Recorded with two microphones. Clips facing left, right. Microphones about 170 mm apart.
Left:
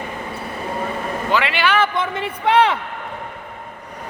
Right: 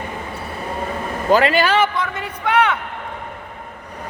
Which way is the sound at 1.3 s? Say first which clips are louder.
Right 6 dB; 40° right (ahead or behind).